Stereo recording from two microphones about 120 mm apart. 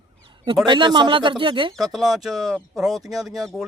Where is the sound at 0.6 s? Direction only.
40° right (ahead or behind).